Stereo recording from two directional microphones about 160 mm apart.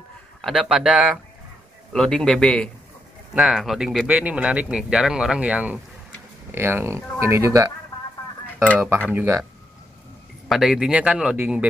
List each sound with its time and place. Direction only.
0.4 s speech: centre (ahead or behind); by 7.7 s 20° right (ahead or behind)
8.7 s speech: 10° right (ahead or behind)
10.5 s speech: 5° right (ahead or behind)